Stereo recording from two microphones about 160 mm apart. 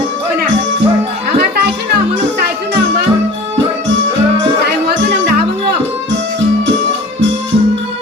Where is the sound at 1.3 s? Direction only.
85° right.